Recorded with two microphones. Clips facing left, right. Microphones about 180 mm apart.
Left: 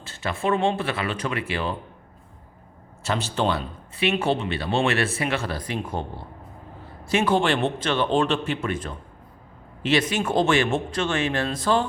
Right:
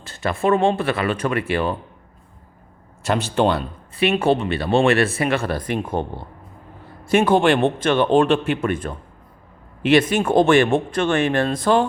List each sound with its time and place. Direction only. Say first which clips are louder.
0.1 s speech: right 5 dB; 50° right (ahead or behind)
3.2 s speech: right 6 dB; 55° right (ahead or behind)